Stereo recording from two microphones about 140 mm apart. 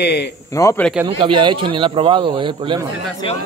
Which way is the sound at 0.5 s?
20° left (ahead or behind).